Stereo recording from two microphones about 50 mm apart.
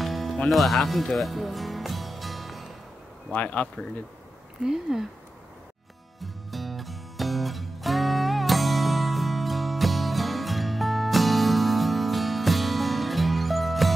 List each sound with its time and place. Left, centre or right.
0.0 s music: centre
3.3 s speech: left
4.6 s speech: centre
6.2 s music: centre